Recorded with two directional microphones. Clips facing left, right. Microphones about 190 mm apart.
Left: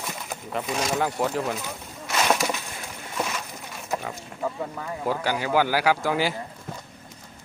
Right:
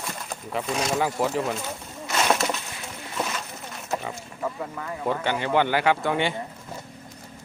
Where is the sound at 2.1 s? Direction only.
Centre (ahead or behind).